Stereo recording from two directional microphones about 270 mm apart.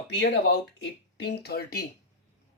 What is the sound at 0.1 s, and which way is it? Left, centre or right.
Speech, left.